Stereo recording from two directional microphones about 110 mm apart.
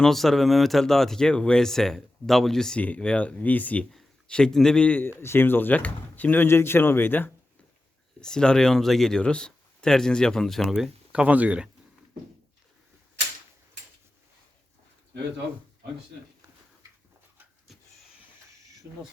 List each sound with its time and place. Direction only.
0.0 s a man's voice: centre (ahead or behind); by 7.3 s 20° left (ahead or behind)
8.2 s speech: 5° left (ahead or behind); by 11.7 s 10° right (ahead or behind)